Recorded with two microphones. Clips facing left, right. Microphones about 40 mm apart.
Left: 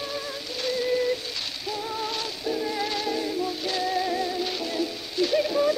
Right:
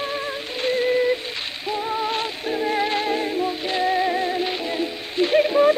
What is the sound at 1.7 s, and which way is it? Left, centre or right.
Music, right.